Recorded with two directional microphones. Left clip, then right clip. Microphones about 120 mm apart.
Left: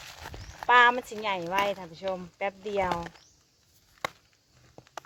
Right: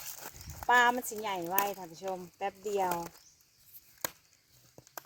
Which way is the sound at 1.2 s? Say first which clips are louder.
Left 7 dB; 40° right (ahead or behind).